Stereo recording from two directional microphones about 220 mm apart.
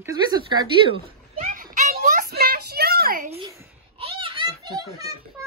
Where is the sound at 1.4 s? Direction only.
35° right (ahead or behind).